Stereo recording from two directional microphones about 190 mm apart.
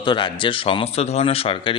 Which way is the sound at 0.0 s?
25° left (ahead or behind).